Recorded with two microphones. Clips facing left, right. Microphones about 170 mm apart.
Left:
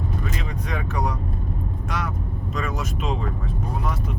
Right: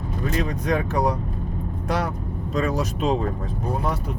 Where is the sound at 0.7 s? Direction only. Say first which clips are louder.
Right 5 dB; 35° right (ahead or behind).